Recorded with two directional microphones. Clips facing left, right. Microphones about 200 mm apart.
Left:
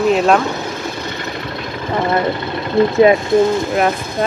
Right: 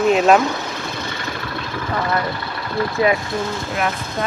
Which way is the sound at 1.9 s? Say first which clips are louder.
Left 6 dB; 25° left (ahead or behind).